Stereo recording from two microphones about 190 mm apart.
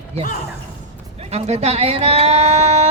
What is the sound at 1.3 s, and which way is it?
Speech, 35° right (ahead or behind).